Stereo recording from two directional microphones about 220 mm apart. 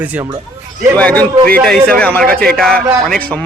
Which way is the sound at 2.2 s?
45° right (ahead or behind).